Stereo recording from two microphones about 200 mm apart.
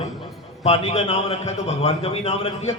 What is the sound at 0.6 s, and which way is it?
A man's voice, 30° left (ahead or behind).